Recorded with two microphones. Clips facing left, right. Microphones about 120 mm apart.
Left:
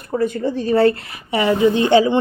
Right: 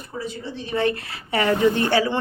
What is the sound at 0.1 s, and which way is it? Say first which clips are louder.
Speech: left 12 dB; 50° left (ahead or behind).